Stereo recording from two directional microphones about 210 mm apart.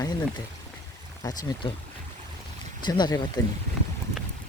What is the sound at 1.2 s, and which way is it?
Speech, 20° left (ahead or behind).